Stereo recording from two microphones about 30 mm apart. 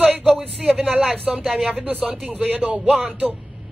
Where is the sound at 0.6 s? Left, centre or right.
Centre.